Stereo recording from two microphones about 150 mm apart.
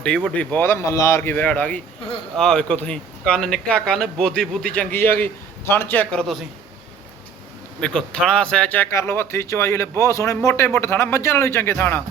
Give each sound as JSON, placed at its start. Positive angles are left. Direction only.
{"t": 0.0, "sound": "a man's voice", "side_deg": 5}
{"t": 7.8, "sound": "a man's voice", "side_deg": 5}